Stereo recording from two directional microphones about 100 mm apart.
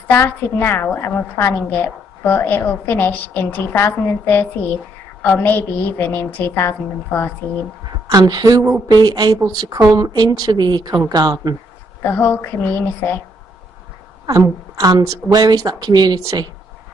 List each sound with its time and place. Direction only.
0.1 s a woman's voice: 20° left (ahead or behind)
8.1 s a woman's voice: 40° right (ahead or behind)
12.0 s a woman's voice: 20° left (ahead or behind)
14.2 s a woman's voice: 40° right (ahead or behind)